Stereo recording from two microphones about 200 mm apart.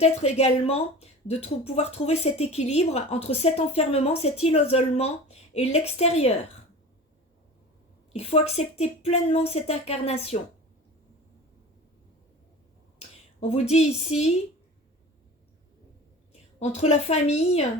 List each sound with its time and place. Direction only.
0.0 s speech: 30° left (ahead or behind)
8.1 s speech: 30° left (ahead or behind)
13.5 s speech: 30° left (ahead or behind)
16.6 s speech: 35° left (ahead or behind)